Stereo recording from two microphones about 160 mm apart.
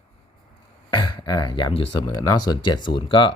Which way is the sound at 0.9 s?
25° left (ahead or behind).